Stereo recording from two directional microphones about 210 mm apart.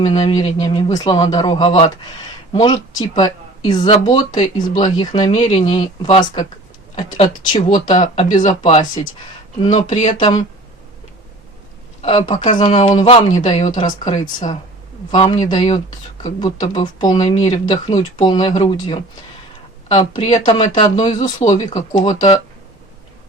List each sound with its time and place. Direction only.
0.1 s speech: 25° left (ahead or behind)
7.9 s speech: 35° left (ahead or behind)
12.0 s speech: 35° left (ahead or behind)
12.5 s speech: 20° left (ahead or behind)
12.7 s speech: 35° left (ahead or behind)
16.7 s speech: 20° left (ahead or behind)
19.9 s speech: 30° left (ahead or behind)
21.0 s speech: 20° left (ahead or behind)
21.4 s speech: 35° left (ahead or behind)